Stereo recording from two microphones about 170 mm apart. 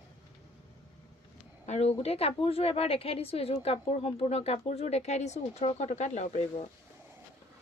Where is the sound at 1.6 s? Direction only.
40° left (ahead or behind).